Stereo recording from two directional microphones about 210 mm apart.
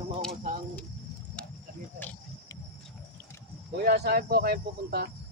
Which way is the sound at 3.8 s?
50° right (ahead or behind).